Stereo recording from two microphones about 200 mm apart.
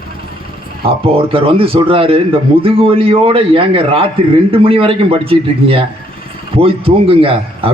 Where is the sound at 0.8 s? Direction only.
30° right (ahead or behind).